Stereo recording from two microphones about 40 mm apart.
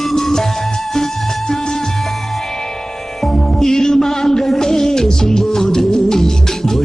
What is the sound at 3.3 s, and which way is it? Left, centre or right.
Music, centre.